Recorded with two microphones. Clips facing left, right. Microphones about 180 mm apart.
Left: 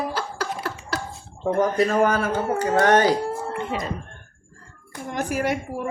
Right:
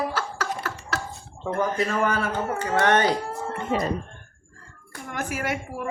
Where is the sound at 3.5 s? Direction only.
40° right (ahead or behind).